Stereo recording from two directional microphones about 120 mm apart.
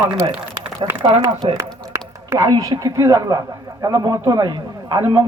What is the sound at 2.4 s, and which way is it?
A man's voice, 30° right (ahead or behind).